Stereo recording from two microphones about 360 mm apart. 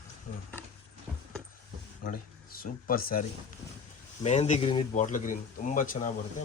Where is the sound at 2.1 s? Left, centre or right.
Left.